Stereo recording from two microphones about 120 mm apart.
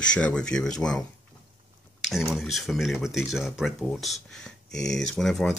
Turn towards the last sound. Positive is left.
turn(degrees=5)  # may be behind; listen again after turning